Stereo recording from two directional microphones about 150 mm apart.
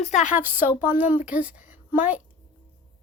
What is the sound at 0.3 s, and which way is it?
A woman's voice, 15° right (ahead or behind).